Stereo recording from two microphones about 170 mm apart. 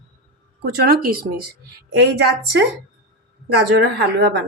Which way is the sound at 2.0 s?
75° right (ahead or behind).